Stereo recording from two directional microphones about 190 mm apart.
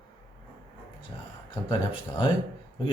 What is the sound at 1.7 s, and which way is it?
Speech, 25° left (ahead or behind).